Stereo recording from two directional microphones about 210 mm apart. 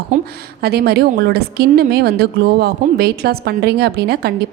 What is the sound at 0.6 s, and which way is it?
A woman's voice, 50° right (ahead or behind).